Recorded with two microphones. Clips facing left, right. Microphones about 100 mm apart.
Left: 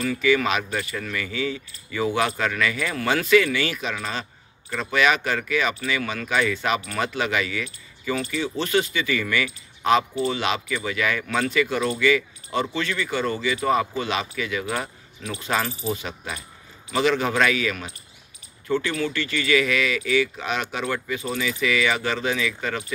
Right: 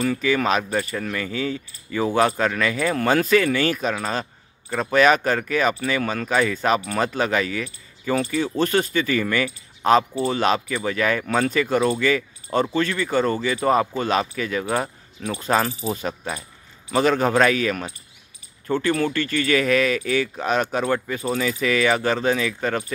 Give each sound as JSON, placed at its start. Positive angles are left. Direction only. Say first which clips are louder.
{"t": 0.0, "sound": "speech", "louder": "even", "side_deg": -40}